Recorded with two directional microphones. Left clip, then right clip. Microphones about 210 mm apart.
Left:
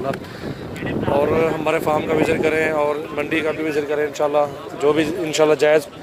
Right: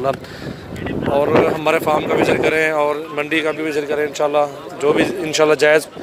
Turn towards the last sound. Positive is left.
turn(degrees=5)  # may be behind; listen again after turning